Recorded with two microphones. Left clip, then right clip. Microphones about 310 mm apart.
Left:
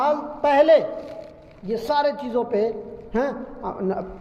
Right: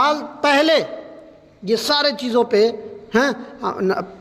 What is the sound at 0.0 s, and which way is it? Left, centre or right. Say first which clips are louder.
A man's voice: right 3 dB; right.